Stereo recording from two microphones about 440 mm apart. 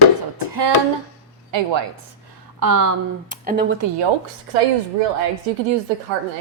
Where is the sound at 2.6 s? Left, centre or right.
Right.